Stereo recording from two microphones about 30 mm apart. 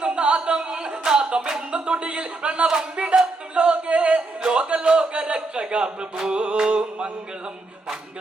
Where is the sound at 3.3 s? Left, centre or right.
Right.